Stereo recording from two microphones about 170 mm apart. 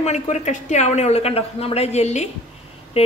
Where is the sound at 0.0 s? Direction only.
45° left (ahead or behind).